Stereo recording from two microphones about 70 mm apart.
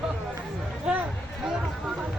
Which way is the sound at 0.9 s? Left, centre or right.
Centre.